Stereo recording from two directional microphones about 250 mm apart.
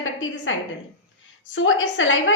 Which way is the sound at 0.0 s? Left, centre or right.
Left.